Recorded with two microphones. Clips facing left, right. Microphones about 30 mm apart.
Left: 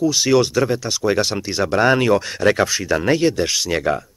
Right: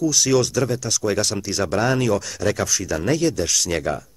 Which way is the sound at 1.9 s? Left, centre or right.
Left.